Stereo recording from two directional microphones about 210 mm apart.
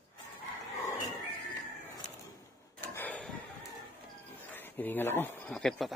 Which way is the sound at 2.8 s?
10° left (ahead or behind).